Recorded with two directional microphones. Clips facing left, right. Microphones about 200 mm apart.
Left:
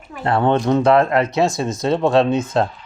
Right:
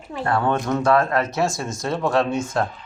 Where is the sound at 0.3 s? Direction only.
25° left (ahead or behind).